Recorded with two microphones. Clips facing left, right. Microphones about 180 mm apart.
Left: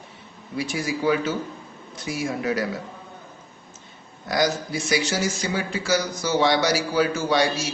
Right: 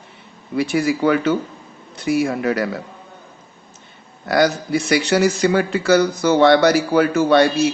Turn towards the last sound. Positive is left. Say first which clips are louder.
# right 8 dB
turn(degrees=-60)  # may be behind; listen again after turning